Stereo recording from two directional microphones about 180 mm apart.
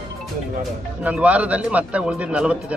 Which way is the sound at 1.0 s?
5° right (ahead or behind).